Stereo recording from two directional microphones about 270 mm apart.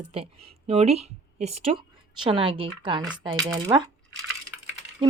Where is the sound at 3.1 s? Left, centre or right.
Centre.